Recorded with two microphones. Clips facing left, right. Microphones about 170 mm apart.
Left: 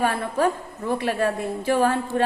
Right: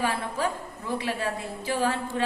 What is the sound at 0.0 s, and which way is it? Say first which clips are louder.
A woman's voice: left 6 dB; 50° left (ahead or behind).